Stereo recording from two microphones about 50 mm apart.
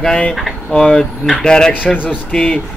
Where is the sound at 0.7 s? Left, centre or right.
Centre.